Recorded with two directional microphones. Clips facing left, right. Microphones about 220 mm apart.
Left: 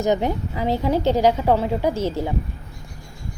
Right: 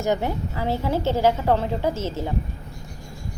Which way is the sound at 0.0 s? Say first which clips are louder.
Left 3 dB; 20° left (ahead or behind).